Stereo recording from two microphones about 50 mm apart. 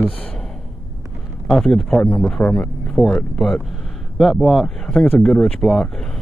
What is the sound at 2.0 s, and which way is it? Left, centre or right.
Speech, centre.